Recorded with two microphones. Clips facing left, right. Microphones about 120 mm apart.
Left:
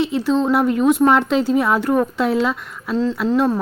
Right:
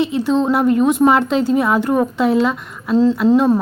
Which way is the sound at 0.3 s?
15° right (ahead or behind).